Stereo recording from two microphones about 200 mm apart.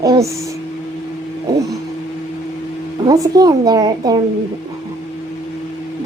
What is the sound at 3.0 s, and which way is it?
A woman's voice, 20° right (ahead or behind).